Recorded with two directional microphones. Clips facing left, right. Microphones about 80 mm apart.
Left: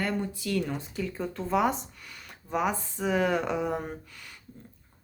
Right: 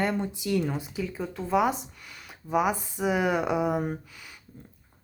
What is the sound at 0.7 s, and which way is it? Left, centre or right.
Speech, centre.